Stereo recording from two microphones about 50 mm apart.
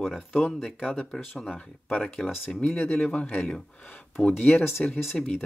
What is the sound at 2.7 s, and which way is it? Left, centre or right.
Speech, left.